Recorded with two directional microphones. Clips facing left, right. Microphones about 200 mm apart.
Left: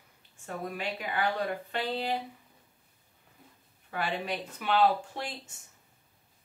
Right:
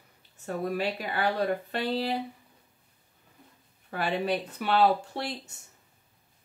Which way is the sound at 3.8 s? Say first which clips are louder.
Right 4 dB; 35° right (ahead or behind).